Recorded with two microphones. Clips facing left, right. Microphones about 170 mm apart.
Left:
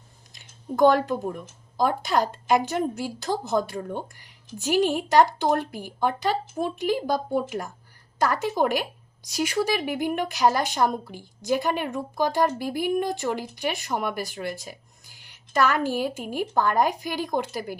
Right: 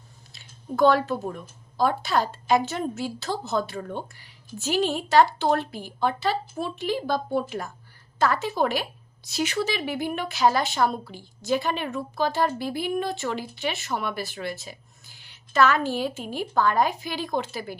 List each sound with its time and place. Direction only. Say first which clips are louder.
0.3 s speech: left 1 dB; 15° left (ahead or behind)